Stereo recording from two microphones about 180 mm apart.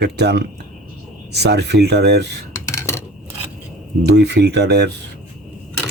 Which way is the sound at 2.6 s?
15° left (ahead or behind).